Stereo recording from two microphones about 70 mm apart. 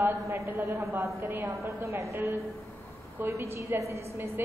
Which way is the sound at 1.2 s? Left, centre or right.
Right.